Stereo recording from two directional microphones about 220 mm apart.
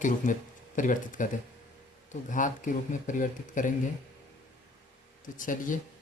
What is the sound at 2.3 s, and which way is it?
Speech, 35° left (ahead or behind).